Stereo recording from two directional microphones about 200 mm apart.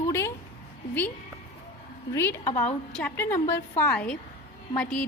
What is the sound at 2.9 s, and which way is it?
A woman's voice, 10° left (ahead or behind).